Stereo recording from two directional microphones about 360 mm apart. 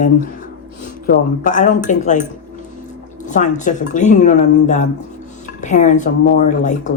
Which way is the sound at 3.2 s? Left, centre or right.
Centre.